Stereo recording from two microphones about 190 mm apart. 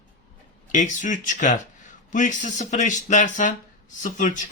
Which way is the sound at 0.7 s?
40° left (ahead or behind).